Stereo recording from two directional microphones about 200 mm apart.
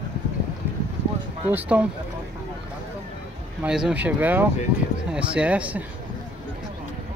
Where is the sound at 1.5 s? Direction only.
5° right (ahead or behind).